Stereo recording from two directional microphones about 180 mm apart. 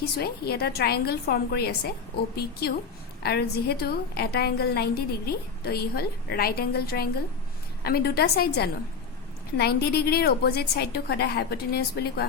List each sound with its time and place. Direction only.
0.2 s a woman's voice: 60° left (ahead or behind)